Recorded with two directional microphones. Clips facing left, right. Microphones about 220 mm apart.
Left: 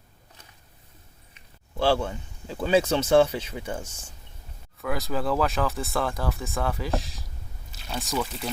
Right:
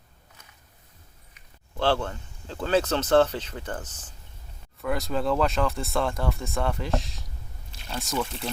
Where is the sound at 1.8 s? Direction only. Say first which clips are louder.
Left 2 dB; 10° left (ahead or behind).